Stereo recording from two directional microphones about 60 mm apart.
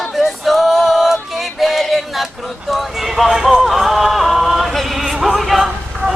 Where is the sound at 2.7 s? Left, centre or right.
Centre.